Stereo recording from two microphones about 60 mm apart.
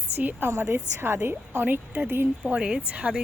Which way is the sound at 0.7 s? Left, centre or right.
Right.